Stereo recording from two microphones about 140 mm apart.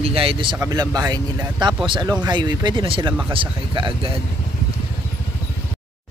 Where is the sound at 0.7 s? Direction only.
25° right (ahead or behind).